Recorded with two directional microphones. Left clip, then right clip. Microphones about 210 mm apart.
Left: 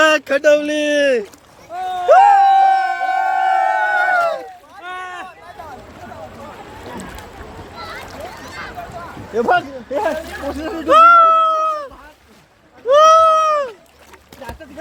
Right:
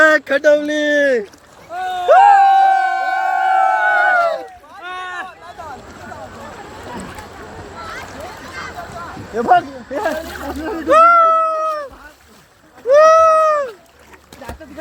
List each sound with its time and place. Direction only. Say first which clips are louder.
0.0 s speech: right 1 dB; centre (ahead or behind)
1.7 s a sound: even; centre (ahead or behind)
4.8 s rowboat: right 2 dB; 15° left (ahead or behind)
9.3 s speech: right 2 dB; 40° left (ahead or behind)
10.8 s cat: left 1 dB; 10° left (ahead or behind)
12.9 s cat: right 1 dB; 5° left (ahead or behind)
14.4 s a sound: even; 45° left (ahead or behind)